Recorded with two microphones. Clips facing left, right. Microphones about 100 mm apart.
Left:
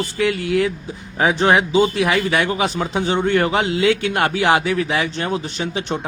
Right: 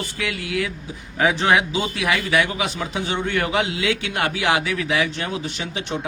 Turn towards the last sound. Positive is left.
turn(degrees=40)  # may be behind; listen again after turning